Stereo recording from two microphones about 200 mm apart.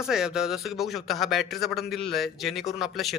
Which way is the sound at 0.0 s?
5° right (ahead or behind).